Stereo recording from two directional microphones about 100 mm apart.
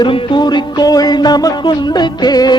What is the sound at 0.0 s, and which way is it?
Music, 55° left (ahead or behind).